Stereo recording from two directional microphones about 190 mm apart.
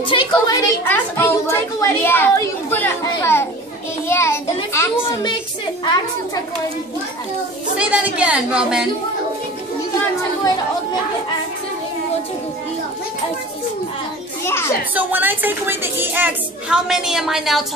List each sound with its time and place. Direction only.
0.1 s a woman's voice: 25° left (ahead or behind)
4.1 s a sound: 15° left (ahead or behind)
4.7 s a woman's voice: 25° left (ahead or behind)
7.7 s a woman's voice: 5° right (ahead or behind)
14.4 s a child's voice: 15° left (ahead or behind)
15.0 s a woman's voice: 10° right (ahead or behind)